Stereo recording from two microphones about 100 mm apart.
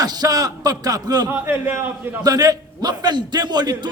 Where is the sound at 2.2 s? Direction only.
40° right (ahead or behind).